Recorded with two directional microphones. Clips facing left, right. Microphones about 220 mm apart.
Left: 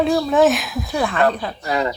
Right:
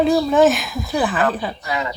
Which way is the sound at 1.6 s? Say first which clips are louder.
Left 7 dB; 40° left (ahead or behind).